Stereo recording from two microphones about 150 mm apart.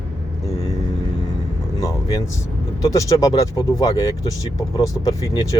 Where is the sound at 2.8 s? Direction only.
20° left (ahead or behind).